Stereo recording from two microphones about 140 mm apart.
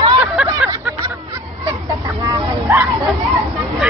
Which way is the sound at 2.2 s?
25° right (ahead or behind).